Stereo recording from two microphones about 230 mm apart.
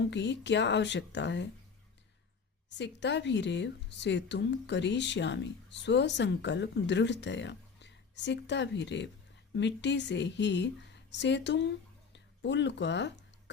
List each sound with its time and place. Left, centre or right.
0.0 s a woman's voice: left
2.6 s a woman's voice: left